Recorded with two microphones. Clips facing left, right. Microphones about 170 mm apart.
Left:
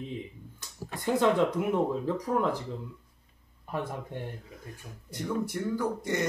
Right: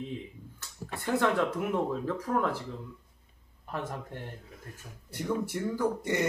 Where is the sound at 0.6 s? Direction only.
15° left (ahead or behind).